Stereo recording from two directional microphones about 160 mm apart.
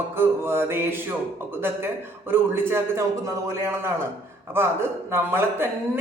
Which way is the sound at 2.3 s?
15° right (ahead or behind).